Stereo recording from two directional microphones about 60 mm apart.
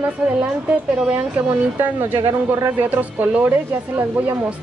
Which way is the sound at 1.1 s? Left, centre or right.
Right.